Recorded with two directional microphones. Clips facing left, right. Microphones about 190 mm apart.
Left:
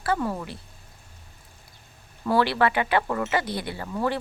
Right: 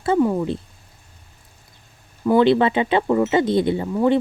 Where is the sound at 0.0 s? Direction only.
20° right (ahead or behind).